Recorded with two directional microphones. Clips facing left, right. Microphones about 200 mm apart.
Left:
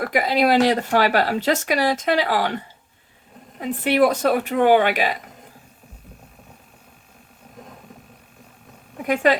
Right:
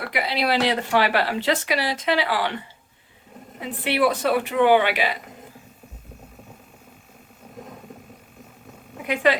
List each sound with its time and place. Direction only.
0.0 s speech: 45° left (ahead or behind)
3.6 s speech: 45° left (ahead or behind)
9.0 s speech: 45° left (ahead or behind)